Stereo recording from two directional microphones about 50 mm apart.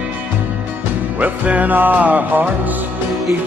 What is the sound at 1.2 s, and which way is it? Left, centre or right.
Music, right.